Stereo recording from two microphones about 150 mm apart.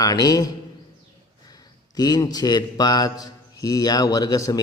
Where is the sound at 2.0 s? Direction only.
25° left (ahead or behind).